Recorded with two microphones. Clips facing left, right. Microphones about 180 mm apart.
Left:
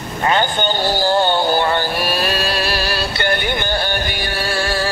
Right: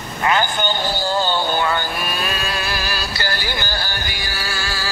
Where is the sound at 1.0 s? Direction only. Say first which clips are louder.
Left 6 dB; 65° left (ahead or behind).